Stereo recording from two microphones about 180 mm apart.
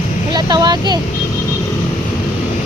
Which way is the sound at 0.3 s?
20° right (ahead or behind).